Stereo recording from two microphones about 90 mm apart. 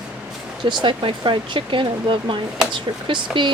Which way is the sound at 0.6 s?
60° right (ahead or behind).